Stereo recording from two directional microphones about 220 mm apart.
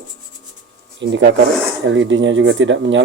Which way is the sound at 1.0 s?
55° right (ahead or behind).